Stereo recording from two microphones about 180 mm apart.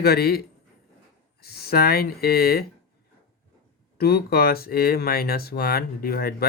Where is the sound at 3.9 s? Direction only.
60° left (ahead or behind).